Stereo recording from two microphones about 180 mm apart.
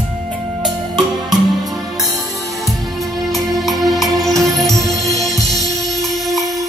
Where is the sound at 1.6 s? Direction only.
Centre (ahead or behind).